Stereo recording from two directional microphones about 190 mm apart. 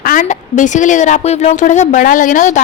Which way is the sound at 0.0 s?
45° left (ahead or behind).